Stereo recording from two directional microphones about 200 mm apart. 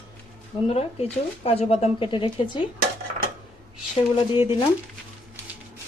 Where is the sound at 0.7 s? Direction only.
30° left (ahead or behind).